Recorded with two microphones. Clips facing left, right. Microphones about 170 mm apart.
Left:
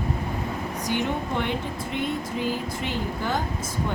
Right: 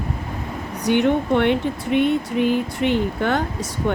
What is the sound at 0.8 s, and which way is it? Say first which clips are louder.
Speech: right 10 dB; 65° right (ahead or behind).